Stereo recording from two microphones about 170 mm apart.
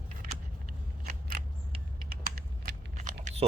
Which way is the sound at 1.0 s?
60° right (ahead or behind).